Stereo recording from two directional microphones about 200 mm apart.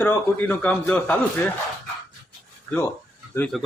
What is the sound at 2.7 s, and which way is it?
Speech, 10° left (ahead or behind).